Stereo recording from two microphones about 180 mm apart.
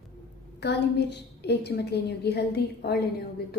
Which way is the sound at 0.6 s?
70° left (ahead or behind).